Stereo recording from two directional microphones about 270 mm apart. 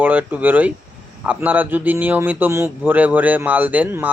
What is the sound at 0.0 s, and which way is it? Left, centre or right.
A man's voice, centre.